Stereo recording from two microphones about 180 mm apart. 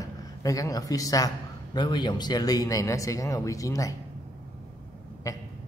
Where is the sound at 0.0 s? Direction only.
20° left (ahead or behind).